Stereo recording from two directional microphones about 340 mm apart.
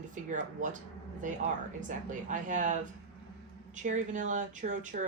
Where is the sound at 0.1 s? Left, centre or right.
Right.